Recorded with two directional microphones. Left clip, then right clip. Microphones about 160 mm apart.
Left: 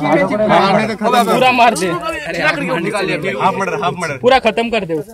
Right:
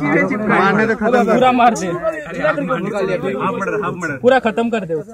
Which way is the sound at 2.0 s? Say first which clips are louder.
Left 2 dB; 10° left (ahead or behind).